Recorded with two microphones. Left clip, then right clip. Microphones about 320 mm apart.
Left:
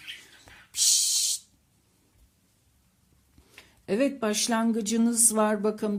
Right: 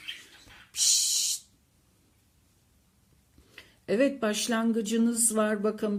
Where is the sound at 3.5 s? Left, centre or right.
Centre.